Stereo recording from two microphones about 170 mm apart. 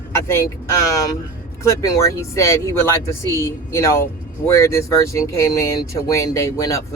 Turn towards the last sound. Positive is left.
turn(degrees=20)  # may be behind; listen again after turning